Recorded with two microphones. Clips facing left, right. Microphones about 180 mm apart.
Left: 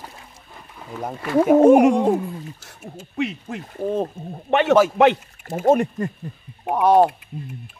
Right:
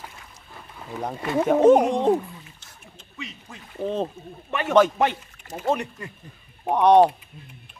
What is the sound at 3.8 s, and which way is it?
Speech, 10° left (ahead or behind).